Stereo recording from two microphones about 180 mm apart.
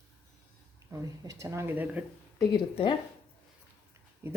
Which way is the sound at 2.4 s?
25° left (ahead or behind).